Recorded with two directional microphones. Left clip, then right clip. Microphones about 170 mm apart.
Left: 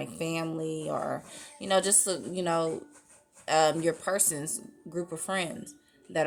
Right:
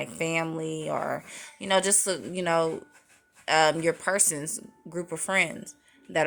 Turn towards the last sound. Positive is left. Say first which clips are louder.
# right 3 dB
turn(degrees=-15)  # may be behind; listen again after turning